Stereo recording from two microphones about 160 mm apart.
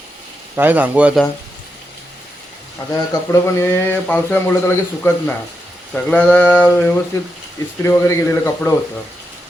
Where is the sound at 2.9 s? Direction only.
15° left (ahead or behind).